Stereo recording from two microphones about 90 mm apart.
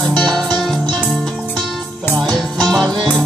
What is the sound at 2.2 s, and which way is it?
Music, 50° right (ahead or behind).